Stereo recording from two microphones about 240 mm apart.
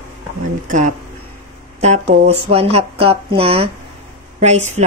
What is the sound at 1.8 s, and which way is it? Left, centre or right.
Speech, right.